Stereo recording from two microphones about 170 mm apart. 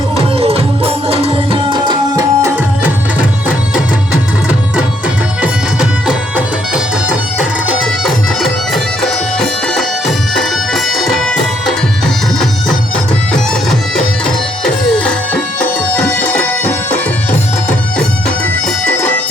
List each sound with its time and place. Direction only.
0.3 s music: 35° right (ahead or behind)
5.4 s music: 5° right (ahead or behind)
14.3 s music: 5° left (ahead or behind)